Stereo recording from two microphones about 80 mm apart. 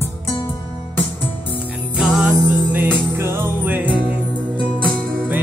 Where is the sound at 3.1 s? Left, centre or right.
Right.